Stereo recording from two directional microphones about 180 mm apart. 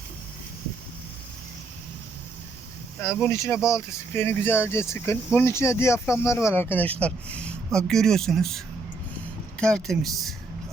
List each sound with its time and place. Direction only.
3.0 s speech: 15° left (ahead or behind)